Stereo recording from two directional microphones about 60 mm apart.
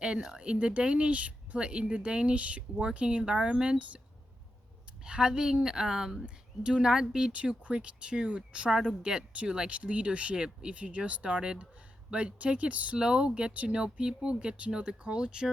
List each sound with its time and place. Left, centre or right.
0.0 s speech: centre
5.0 s speech: centre